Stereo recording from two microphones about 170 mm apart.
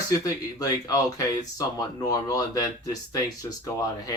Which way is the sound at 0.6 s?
20° left (ahead or behind).